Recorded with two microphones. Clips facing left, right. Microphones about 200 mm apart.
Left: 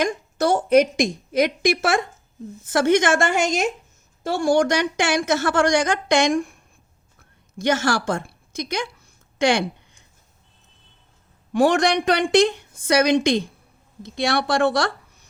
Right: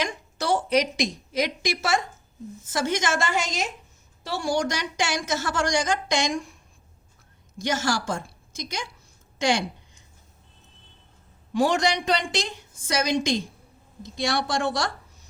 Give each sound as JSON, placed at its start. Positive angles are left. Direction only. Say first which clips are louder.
{"t": 0.0, "sound": "a woman's voice", "louder": "left 8 dB", "side_deg": 45}
{"t": 7.6, "sound": "a woman's voice", "louder": "left 5 dB", "side_deg": 60}
{"t": 9.4, "sound": "a sound", "louder": "left 5 dB", "side_deg": 60}
{"t": 11.5, "sound": "a woman's voice", "louder": "left 5 dB", "side_deg": 60}